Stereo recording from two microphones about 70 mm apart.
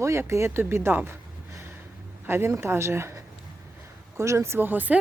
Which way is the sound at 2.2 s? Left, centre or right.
Right.